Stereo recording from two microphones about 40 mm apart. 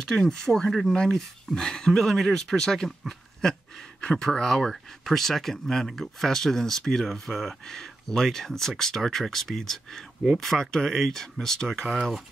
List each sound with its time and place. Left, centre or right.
0.1 s speech: centre
1.9 s speech: centre